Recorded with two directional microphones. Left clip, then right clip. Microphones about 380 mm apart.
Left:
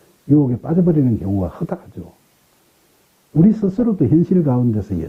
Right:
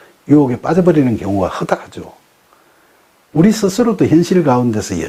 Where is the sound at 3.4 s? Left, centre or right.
Centre.